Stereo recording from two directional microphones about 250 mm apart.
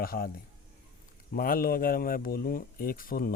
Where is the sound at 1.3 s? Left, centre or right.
Left.